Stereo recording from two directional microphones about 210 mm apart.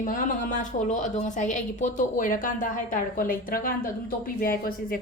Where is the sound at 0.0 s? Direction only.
40° left (ahead or behind).